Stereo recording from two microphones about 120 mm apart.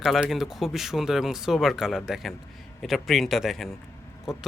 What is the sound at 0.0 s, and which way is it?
Speech, centre (ahead or behind).